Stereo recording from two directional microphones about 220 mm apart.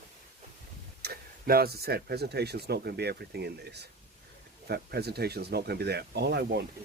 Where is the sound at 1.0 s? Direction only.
45° right (ahead or behind).